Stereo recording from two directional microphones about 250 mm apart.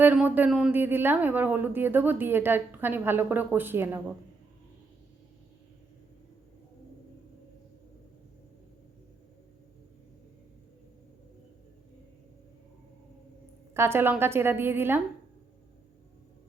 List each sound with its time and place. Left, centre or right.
0.0 s speech: centre
13.7 s speech: centre